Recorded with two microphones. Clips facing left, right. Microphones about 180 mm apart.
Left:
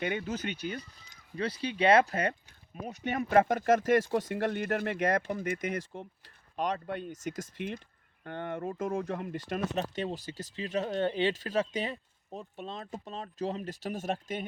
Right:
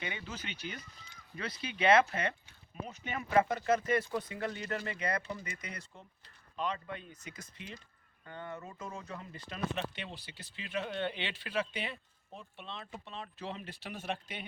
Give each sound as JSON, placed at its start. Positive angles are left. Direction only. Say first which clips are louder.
{"t": 0.0, "sound": "speech", "louder": "left 10 dB", "side_deg": 50}
{"t": 0.8, "sound": "speech", "louder": "left 6 dB", "side_deg": 35}
{"t": 4.1, "sound": "speech", "louder": "left 7 dB", "side_deg": 75}
{"t": 7.3, "sound": "speech", "louder": "left 12 dB", "side_deg": 55}